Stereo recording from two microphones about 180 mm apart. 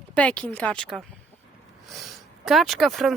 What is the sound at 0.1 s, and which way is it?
A woman's voice, 5° left (ahead or behind).